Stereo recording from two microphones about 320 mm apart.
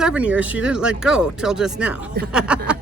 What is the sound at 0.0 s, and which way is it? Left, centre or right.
Speech, centre.